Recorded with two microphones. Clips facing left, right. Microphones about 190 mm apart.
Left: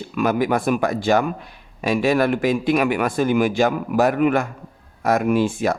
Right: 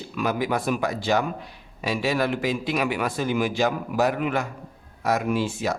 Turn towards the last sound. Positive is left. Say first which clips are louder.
# left 6 dB
turn(degrees=55)  # may be behind; listen again after turning